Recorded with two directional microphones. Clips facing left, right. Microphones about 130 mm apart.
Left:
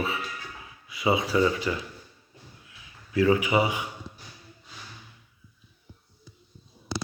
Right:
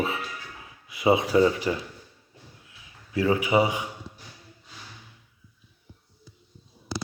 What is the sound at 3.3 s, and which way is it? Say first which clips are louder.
Speech: right 3 dB; 30° right (ahead or behind).